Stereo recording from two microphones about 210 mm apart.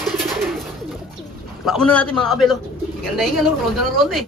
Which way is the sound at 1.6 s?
Centre (ahead or behind).